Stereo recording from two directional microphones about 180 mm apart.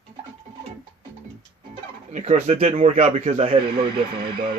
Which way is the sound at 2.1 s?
40° right (ahead or behind).